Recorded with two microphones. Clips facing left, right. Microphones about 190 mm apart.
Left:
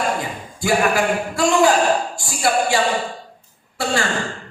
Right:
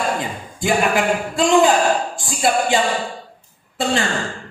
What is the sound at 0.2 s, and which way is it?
Speech, 20° right (ahead or behind).